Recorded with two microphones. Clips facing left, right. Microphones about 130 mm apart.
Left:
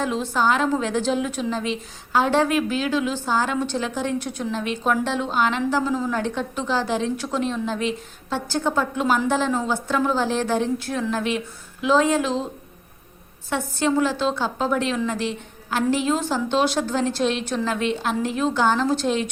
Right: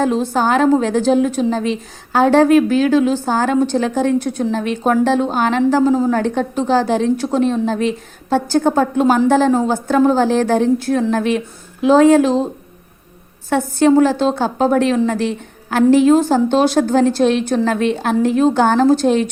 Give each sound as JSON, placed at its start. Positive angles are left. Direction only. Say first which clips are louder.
{"t": 0.0, "sound": "a woman's voice", "louder": "right 6 dB", "side_deg": -40}
{"t": 13.5, "sound": "a woman's voice", "louder": "right 10 dB", "side_deg": -45}